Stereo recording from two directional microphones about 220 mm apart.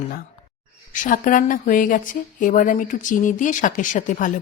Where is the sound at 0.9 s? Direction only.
35° left (ahead or behind).